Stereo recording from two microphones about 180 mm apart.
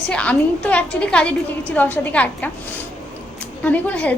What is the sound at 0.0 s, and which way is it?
A woman's voice, 5° left (ahead or behind).